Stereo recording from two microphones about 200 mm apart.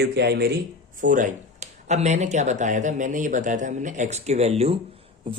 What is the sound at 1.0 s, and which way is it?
Speech, 40° right (ahead or behind).